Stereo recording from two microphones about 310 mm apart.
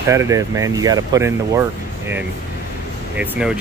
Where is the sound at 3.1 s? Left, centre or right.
Centre.